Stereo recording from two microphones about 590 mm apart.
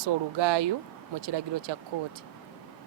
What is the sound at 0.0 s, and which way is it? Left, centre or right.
Speech, right.